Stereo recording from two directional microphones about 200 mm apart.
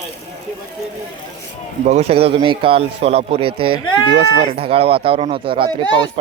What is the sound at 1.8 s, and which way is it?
Speech, 35° right (ahead or behind).